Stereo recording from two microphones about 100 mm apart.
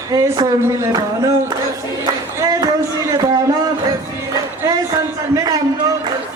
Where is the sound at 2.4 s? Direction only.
35° right (ahead or behind).